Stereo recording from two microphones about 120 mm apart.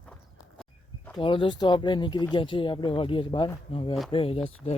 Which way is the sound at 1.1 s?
45° left (ahead or behind).